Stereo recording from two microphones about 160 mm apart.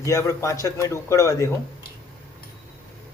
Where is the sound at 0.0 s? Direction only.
20° left (ahead or behind).